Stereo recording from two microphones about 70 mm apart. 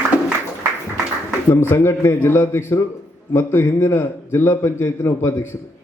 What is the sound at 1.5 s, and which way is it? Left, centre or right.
Speech, left.